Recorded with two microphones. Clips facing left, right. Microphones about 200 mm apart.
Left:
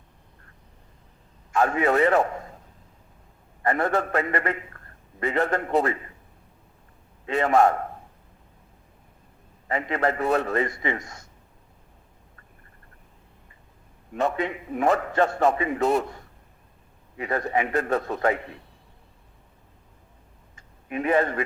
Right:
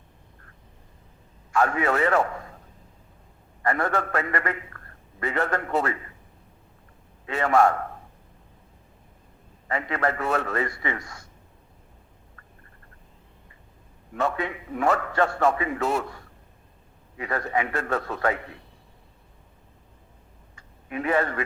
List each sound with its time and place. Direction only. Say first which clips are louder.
1.5 s a man's voice: left 2 dB; 25° left (ahead or behind)
3.6 s a man's voice: left 2 dB; 20° left (ahead or behind)
7.3 s a man's voice: left 1 dB; 20° left (ahead or behind)
9.6 s a man's voice: left 2 dB; 20° left (ahead or behind)
14.1 s a man's voice: left 2 dB; 20° left (ahead or behind)
17.2 s a man's voice: left 2 dB; 20° left (ahead or behind)
20.6 s a man's voice: left 2 dB; 20° left (ahead or behind)